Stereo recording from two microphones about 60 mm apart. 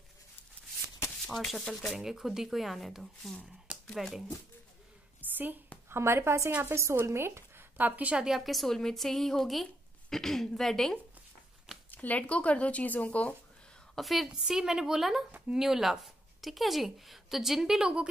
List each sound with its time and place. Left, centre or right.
1.2 s speech: centre
5.2 s a sound: right
5.9 s speech: right
7.7 s a woman's voice: right
8.2 s speech: centre
11.9 s speech: left
13.9 s a woman's voice: centre